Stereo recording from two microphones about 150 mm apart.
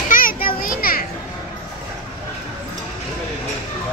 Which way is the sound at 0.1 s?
70° left (ahead or behind).